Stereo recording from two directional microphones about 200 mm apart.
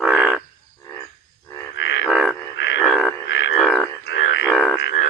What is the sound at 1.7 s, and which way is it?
Frog, 60° left (ahead or behind).